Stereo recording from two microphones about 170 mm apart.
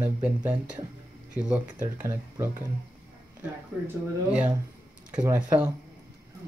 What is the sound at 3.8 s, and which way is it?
Speech, 5° right (ahead or behind).